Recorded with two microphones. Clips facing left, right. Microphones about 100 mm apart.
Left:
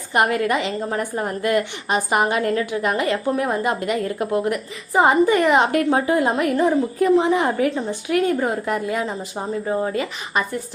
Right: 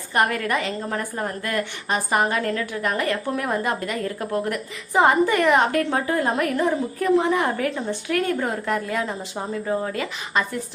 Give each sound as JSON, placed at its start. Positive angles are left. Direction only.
{"t": 0.1, "sound": "a woman's voice", "side_deg": 15}